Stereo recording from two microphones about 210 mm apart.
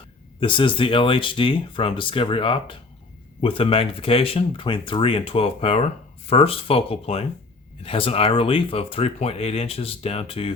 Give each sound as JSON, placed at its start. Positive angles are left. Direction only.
{"t": 0.3, "sound": "speech", "side_deg": 25}